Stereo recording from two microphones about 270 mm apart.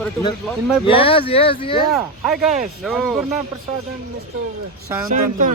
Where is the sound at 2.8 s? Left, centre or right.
Centre.